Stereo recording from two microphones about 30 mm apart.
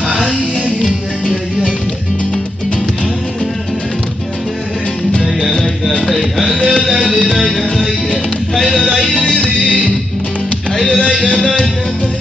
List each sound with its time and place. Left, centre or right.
5.9 s music: centre
8.7 s music: centre
9.1 s music: left
11.0 s a sound: left